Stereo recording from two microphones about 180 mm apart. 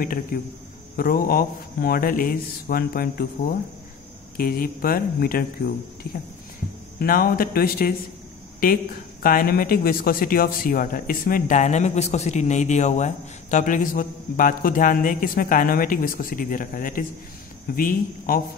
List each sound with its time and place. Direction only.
0.0 s speech: 50° left (ahead or behind)
4.4 s speech: 55° left (ahead or behind)
7.0 s speech: 55° left (ahead or behind)